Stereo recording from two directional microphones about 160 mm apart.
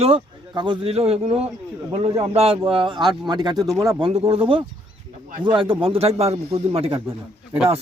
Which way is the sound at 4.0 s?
35° right (ahead or behind).